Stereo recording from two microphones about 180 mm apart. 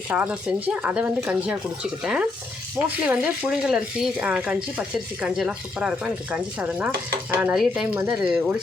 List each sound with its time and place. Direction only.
0.1 s speech: 10° right (ahead or behind)